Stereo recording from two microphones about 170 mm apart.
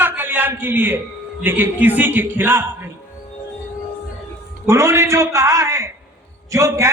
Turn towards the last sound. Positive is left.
turn(degrees=-15)  # may be behind; listen again after turning